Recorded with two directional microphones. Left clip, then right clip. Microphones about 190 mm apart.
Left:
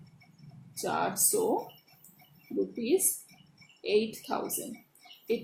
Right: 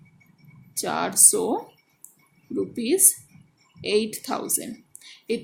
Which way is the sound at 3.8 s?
45° right (ahead or behind).